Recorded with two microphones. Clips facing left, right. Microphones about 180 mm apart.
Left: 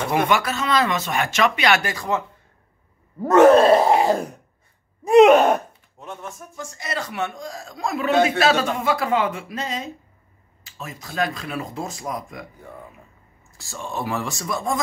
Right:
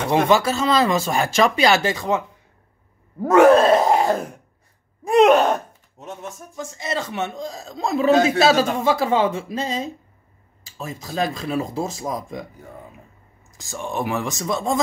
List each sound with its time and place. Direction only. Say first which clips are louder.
0.1 s speech: right 4 dB; 25° right (ahead or behind)
3.2 s groan: even; 5° right (ahead or behind)
5.0 s a sound: left 2 dB; 5° left (ahead or behind)
6.5 s speech: right 4 dB; 20° right (ahead or behind)
13.5 s speech: right 3 dB; 15° right (ahead or behind)